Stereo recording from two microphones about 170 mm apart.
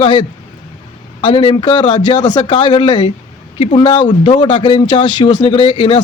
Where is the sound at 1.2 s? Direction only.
30° left (ahead or behind).